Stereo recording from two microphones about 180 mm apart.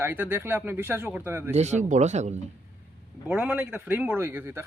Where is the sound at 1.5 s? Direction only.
40° right (ahead or behind).